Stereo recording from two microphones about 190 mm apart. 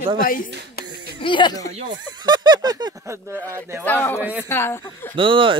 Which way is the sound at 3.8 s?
10° left (ahead or behind).